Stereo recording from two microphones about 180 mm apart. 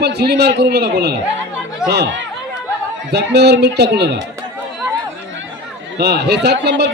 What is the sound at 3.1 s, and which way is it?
Speech, 70° right (ahead or behind).